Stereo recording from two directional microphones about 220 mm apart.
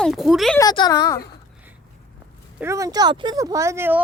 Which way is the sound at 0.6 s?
20° left (ahead or behind).